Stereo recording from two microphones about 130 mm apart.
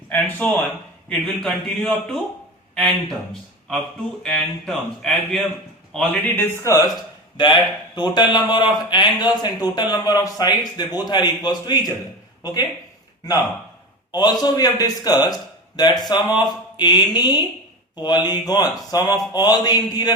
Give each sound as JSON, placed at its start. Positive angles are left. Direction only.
{"t": 0.1, "sound": "speech", "side_deg": 15}
{"t": 4.2, "sound": "a man's voice", "side_deg": 0}
{"t": 6.2, "sound": "speech", "side_deg": 15}
{"t": 7.3, "sound": "a man's voice", "side_deg": 35}
{"t": 14.1, "sound": "a man's voice", "side_deg": 30}